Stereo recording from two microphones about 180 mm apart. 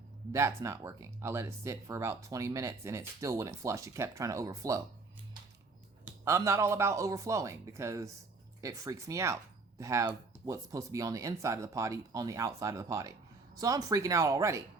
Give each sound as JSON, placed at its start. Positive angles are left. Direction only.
{"t": 0.3, "sound": "speech", "side_deg": -15}
{"t": 6.1, "sound": "speech", "side_deg": -15}